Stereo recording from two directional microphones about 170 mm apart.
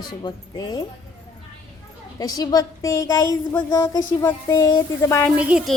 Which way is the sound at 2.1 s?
20° left (ahead or behind).